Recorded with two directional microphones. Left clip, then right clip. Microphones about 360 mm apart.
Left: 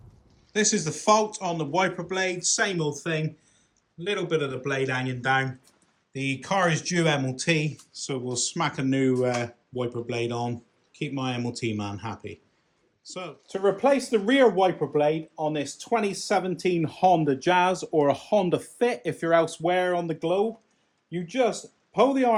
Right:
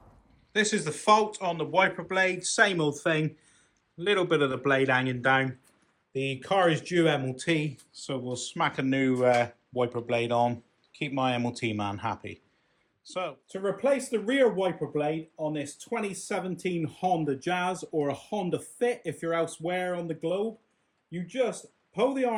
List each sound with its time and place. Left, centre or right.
0.5 s speech: centre
13.5 s speech: left
21.9 s speech: left